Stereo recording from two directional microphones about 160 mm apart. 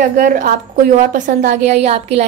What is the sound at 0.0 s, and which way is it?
A woman's voice, 55° right (ahead or behind).